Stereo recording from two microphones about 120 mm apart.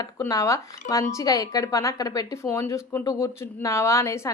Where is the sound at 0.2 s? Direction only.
25° left (ahead or behind).